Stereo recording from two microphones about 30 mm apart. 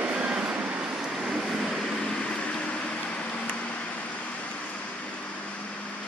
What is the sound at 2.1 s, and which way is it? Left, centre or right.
Vehicle, left.